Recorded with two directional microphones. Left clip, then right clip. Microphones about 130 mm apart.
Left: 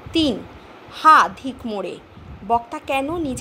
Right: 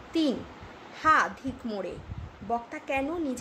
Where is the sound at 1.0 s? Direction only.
30° left (ahead or behind).